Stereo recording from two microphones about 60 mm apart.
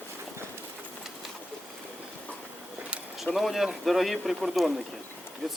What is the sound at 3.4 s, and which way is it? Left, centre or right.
A man's voice, centre.